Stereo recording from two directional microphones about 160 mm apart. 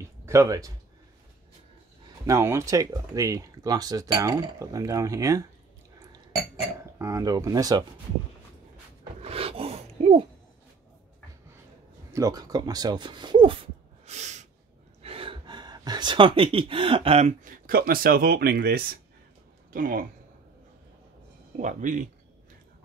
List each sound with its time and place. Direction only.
0.0 s speech: 15° right (ahead or behind)
2.2 s speech: 20° right (ahead or behind)
7.0 s speech: 20° right (ahead or behind)
9.2 s rub: 35° right (ahead or behind)
12.1 s speech: 25° right (ahead or behind); by 14.5 s 45° right (ahead or behind)
15.0 s speech: 35° right (ahead or behind); by 18.9 s 75° right (ahead or behind)
19.7 s speech: 60° right (ahead or behind)
21.5 s speech: 50° right (ahead or behind)